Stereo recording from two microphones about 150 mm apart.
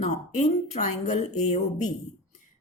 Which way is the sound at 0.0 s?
50° left (ahead or behind).